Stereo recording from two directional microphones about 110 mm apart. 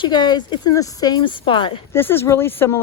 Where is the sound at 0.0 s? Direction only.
40° left (ahead or behind).